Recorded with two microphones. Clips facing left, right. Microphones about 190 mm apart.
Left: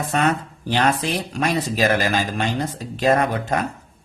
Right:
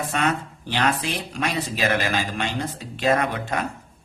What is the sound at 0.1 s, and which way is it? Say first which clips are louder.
Speech: left 6 dB; 40° left (ahead or behind).